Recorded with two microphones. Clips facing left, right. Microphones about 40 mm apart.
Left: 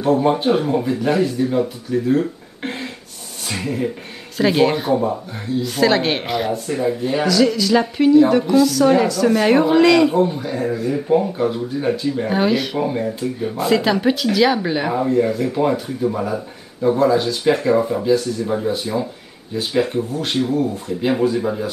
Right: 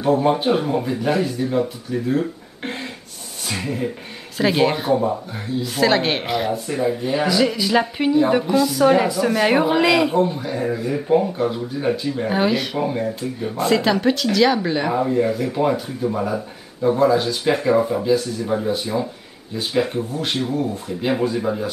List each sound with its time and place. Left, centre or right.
0.0 s speech: centre
7.2 s a woman's voice: centre